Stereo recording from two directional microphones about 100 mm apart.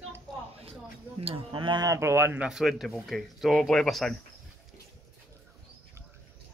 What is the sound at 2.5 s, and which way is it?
Speech, centre (ahead or behind).